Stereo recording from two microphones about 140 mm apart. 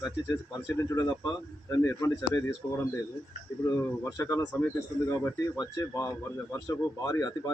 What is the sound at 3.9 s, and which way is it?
A man's voice, 20° left (ahead or behind).